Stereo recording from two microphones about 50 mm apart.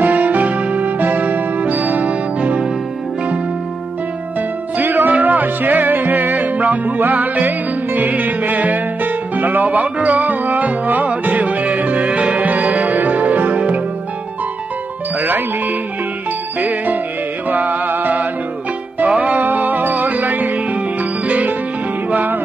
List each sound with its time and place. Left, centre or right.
0.0 s music: right
4.4 s music: right
15.1 s music: right